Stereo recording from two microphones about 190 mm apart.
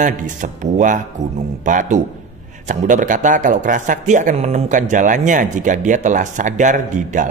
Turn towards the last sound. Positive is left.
turn(degrees=-40)  # may be behind; listen again after turning